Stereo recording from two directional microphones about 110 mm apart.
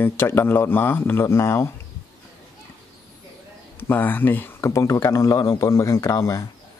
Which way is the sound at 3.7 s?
20° left (ahead or behind).